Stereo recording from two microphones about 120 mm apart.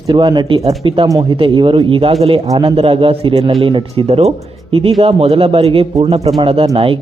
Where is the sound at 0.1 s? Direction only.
40° right (ahead or behind).